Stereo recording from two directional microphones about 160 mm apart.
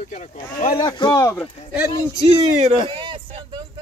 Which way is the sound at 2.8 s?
30° right (ahead or behind).